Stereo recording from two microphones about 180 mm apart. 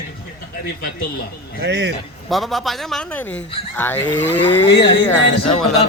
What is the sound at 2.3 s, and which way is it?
A man's voice, centre (ahead or behind).